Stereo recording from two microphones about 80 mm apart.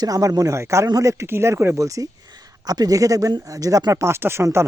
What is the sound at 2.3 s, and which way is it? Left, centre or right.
Speech, right.